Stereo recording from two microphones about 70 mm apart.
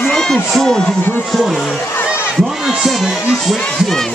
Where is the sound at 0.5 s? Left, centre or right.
Centre.